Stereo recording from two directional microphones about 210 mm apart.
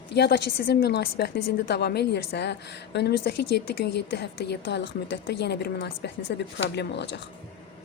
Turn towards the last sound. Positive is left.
turn(degrees=55)  # may be behind; listen again after turning